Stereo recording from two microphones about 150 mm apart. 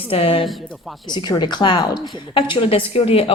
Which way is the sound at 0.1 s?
40° left (ahead or behind).